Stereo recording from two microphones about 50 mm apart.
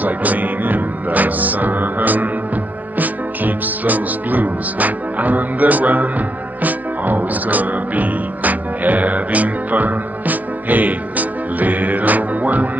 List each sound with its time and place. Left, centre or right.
0.0 s music: right